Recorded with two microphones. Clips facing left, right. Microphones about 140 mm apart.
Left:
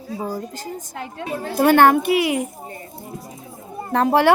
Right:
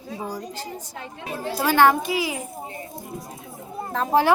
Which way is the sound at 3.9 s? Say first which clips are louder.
Left 4 dB; 70° left (ahead or behind).